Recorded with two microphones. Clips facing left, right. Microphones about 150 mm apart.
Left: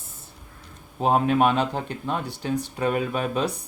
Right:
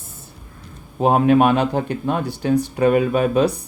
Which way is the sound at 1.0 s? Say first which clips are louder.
Right 6 dB; 70° right (ahead or behind).